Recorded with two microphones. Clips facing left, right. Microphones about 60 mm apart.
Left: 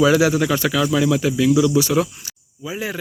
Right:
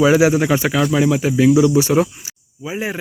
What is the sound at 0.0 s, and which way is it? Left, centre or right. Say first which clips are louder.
Speech: right 2 dB; right.